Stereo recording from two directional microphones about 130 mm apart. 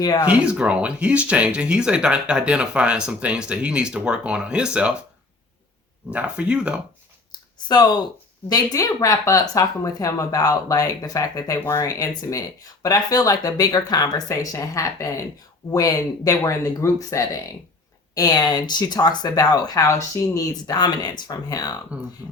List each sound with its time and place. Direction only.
0.0 s speech: 30° left (ahead or behind)
0.3 s speech: 10° right (ahead or behind)
6.1 s speech: 10° right (ahead or behind)
7.7 s speech: 35° left (ahead or behind)
22.2 s speech: 20° right (ahead or behind)